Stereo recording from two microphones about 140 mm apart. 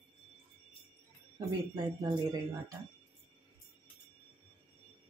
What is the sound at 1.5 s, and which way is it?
Speech, 25° right (ahead or behind).